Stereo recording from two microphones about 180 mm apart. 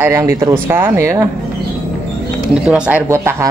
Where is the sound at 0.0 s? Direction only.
15° right (ahead or behind).